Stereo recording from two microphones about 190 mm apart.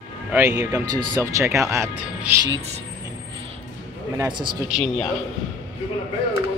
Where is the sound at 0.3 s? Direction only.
10° right (ahead or behind).